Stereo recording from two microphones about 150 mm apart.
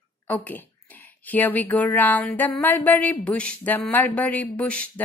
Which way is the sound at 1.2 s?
10° left (ahead or behind).